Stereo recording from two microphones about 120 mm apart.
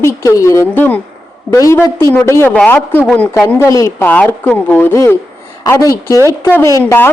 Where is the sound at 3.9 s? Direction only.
15° left (ahead or behind).